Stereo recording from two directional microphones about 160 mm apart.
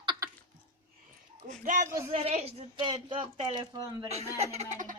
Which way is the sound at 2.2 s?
40° right (ahead or behind).